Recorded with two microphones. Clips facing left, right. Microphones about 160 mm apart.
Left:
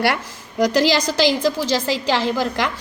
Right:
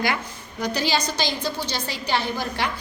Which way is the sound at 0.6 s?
90° left.